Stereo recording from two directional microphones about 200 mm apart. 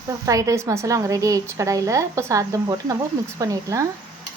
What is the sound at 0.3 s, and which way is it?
A woman's voice, 15° right (ahead or behind).